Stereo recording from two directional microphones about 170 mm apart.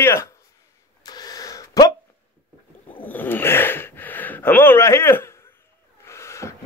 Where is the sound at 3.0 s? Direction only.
10° left (ahead or behind).